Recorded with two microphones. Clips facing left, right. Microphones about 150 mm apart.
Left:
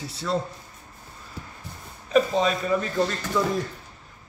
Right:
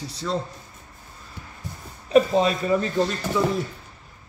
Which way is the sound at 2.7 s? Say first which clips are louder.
Right 2 dB; 10° right (ahead or behind).